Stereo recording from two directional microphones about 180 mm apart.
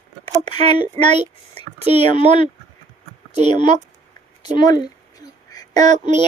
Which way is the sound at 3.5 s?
25° left (ahead or behind).